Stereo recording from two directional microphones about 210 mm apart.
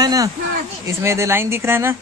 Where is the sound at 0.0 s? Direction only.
15° right (ahead or behind).